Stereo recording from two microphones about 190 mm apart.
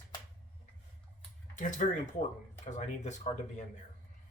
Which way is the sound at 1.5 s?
40° left (ahead or behind).